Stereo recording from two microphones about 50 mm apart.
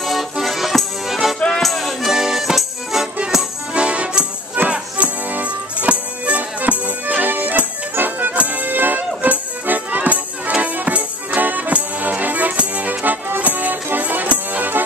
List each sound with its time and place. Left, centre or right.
0.0 s music: centre
3.7 s music: right
4.6 s music: right